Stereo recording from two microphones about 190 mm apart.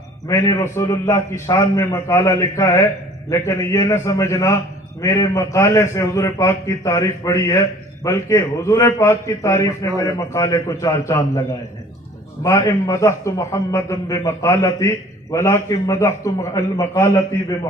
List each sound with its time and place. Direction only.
0.3 s a man's voice: 15° left (ahead or behind)